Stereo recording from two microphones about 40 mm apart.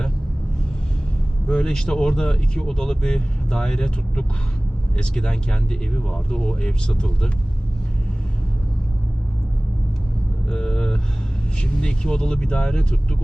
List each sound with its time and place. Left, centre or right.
1.5 s speech: centre
10.5 s vehicle: centre
11.5 s speech: left